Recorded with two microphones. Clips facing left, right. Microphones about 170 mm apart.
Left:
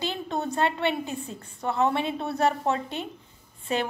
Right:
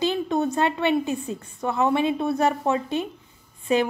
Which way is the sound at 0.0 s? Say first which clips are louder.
Right 7 dB; 15° right (ahead or behind).